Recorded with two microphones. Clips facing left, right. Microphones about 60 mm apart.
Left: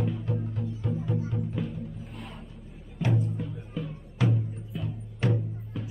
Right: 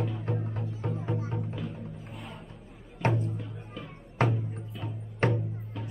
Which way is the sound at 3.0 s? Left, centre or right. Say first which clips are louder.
Even; right.